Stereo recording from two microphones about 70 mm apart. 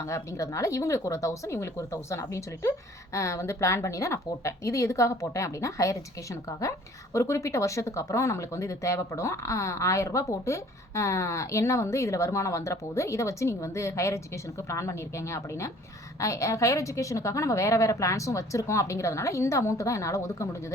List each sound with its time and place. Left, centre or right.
0.0 s speech: left